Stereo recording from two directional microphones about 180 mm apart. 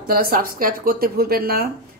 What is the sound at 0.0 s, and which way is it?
A woman's voice, 55° right (ahead or behind).